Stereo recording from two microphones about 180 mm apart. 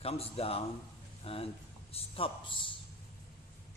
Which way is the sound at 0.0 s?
35° left (ahead or behind).